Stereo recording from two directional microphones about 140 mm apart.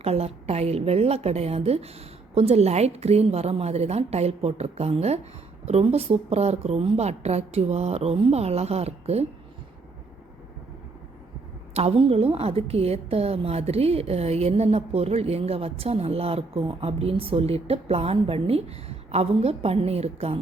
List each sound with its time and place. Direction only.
0.0 s a woman's voice: 45° right (ahead or behind)
11.7 s a woman's voice: 45° right (ahead or behind)